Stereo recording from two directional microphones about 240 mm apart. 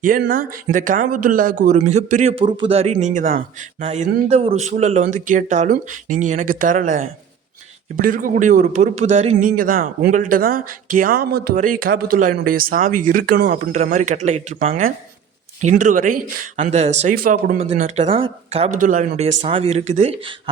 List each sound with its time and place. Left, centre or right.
0.0 s a man's voice: right